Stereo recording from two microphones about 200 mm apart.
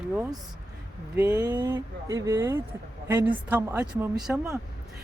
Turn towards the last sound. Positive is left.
turn(degrees=-5)  # may be behind; listen again after turning